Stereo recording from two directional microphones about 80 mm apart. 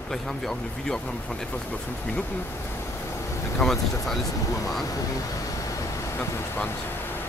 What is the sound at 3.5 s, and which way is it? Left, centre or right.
Speech, centre.